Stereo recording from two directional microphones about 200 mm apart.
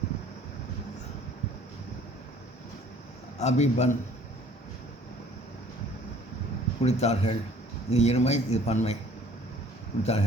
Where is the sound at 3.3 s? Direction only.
35° left (ahead or behind).